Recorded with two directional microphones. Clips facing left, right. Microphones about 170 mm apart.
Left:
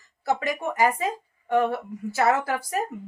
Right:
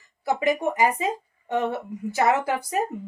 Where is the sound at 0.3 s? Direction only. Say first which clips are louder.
Right 3 dB; 20° right (ahead or behind).